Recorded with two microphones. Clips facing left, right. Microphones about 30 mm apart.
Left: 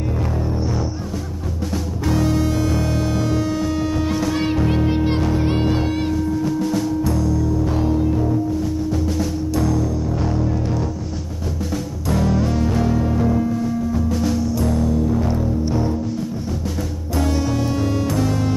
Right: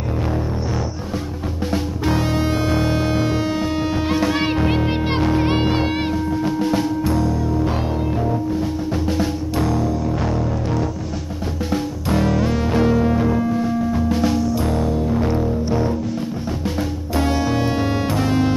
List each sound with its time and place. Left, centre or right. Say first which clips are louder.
1.6 s music: right 3 dB; right
10.2 s music: even; centre
11.7 s music: right 3 dB; right
16.6 s music: right 3 dB; right
17.3 s music: right 1 dB; centre
17.6 s music: right 1 dB; right